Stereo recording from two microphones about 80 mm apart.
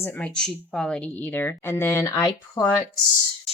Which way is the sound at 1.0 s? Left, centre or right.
Left.